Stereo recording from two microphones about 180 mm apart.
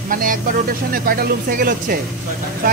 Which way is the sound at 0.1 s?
50° right (ahead or behind).